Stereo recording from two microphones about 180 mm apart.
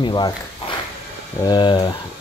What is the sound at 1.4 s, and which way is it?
Speech, 25° left (ahead or behind).